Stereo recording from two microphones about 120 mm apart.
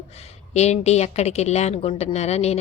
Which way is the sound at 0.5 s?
65° left (ahead or behind).